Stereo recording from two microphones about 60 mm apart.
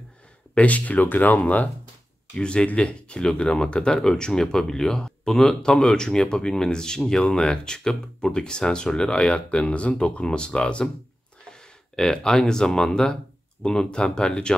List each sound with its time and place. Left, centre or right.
0.6 s speech: left
11.9 s speech: centre